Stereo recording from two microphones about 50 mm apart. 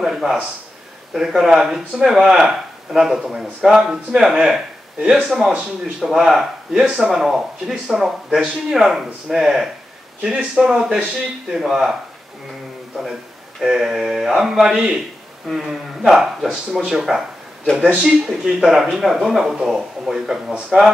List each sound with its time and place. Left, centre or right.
0.0 s speech: centre
5.0 s speech: right
5.9 s speech: centre
17.1 s speech: centre